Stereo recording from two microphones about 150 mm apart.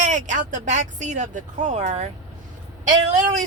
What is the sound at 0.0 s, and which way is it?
Speech, 55° right (ahead or behind).